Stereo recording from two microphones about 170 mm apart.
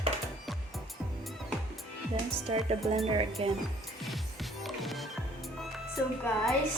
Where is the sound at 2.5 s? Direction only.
40° right (ahead or behind).